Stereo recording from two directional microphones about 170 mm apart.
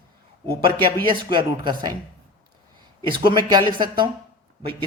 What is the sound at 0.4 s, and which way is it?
Speech, 30° right (ahead or behind).